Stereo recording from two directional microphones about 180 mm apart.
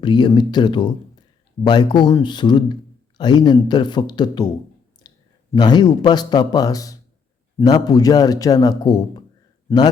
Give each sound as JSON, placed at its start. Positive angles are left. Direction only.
{"t": 0.0, "sound": "a man's voice", "side_deg": 25}
{"t": 5.0, "sound": "clicking", "side_deg": 25}
{"t": 5.5, "sound": "a man's voice", "side_deg": 25}